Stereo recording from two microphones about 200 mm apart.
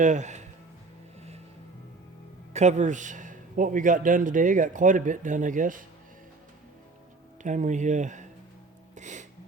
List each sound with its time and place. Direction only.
0.0 s speech: 35° right (ahead or behind)
2.5 s a man's voice: 35° right (ahead or behind)
7.4 s a man's voice: 40° right (ahead or behind)
9.0 s music: 35° right (ahead or behind)